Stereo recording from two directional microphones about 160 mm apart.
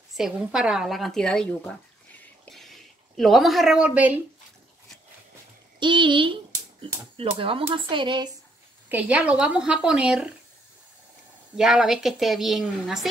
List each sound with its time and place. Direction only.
0.1 s speech: 5° right (ahead or behind)
5.8 s speech: 30° right (ahead or behind)
8.8 s speech: 10° right (ahead or behind)
11.5 s speech: centre (ahead or behind)